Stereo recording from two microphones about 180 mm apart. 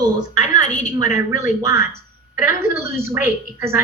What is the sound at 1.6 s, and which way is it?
A woman's voice, 15° right (ahead or behind).